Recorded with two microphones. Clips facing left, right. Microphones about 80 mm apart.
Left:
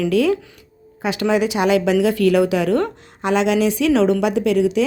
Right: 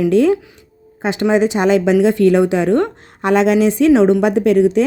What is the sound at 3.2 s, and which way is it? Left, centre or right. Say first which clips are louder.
Speech: right 4 dB; right.